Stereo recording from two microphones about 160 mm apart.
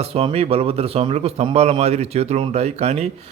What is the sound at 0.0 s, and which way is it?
A man's voice, 40° right (ahead or behind).